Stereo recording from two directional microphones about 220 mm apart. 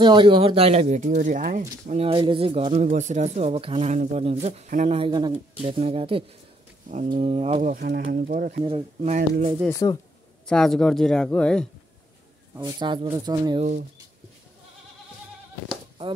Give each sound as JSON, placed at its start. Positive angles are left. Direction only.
{"t": 0.0, "sound": "speech", "side_deg": -20}
{"t": 9.7, "sound": "speech", "side_deg": 15}
{"t": 10.4, "sound": "speech", "side_deg": 5}
{"t": 12.5, "sound": "speech", "side_deg": -20}
{"t": 13.6, "sound": "speech", "side_deg": -30}